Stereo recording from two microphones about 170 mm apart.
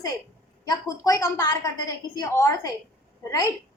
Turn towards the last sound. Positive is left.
turn(degrees=20)  # may be behind; listen again after turning